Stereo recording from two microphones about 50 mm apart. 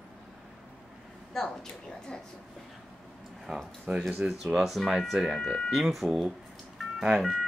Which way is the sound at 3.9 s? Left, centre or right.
Right.